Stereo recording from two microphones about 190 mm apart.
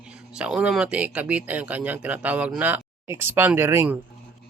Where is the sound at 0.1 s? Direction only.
5° right (ahead or behind).